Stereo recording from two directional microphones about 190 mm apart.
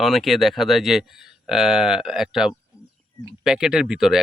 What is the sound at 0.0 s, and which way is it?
Speech, centre (ahead or behind).